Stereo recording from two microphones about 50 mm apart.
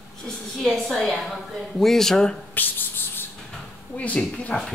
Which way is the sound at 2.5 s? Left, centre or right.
Left.